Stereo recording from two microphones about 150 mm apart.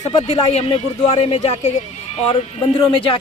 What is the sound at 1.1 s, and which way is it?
Speech, 40° left (ahead or behind).